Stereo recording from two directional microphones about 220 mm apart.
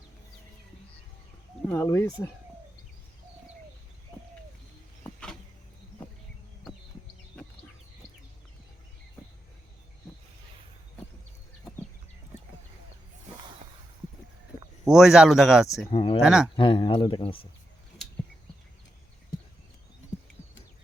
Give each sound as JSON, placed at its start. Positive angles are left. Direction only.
{"t": 1.7, "sound": "speech", "side_deg": 10}
{"t": 14.8, "sound": "speech", "side_deg": 0}
{"t": 15.9, "sound": "a sound", "side_deg": 25}
{"t": 16.2, "sound": "speech", "side_deg": 0}
{"t": 16.6, "sound": "speech", "side_deg": 20}